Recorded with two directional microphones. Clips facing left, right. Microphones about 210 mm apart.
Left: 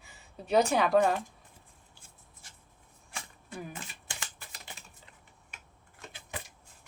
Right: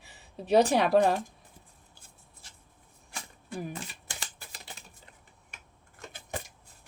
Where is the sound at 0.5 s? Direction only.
35° right (ahead or behind).